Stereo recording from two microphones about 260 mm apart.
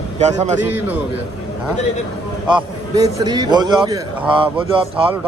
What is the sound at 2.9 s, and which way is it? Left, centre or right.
A man's voice, centre.